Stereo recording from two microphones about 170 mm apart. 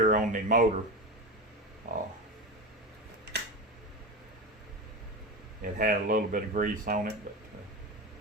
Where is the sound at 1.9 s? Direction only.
50° right (ahead or behind).